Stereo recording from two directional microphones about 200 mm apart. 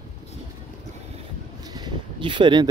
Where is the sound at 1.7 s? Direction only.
20° right (ahead or behind).